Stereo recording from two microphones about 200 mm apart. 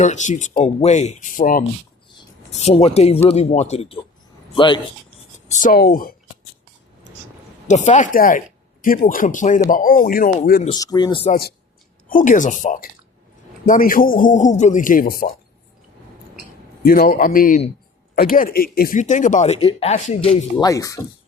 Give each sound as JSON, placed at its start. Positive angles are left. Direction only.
{"t": 0.0, "sound": "speech", "side_deg": 35}
{"t": 5.5, "sound": "a man's voice", "side_deg": 40}
{"t": 7.7, "sound": "a man's voice", "side_deg": 40}
{"t": 10.7, "sound": "speech", "side_deg": 20}
{"t": 11.3, "sound": "a man's voice", "side_deg": 50}
{"t": 16.8, "sound": "a man's voice", "side_deg": 45}
{"t": 20.6, "sound": "speech", "side_deg": 15}